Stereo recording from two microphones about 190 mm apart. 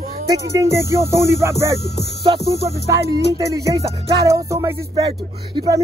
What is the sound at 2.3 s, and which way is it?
Speech, 25° right (ahead or behind).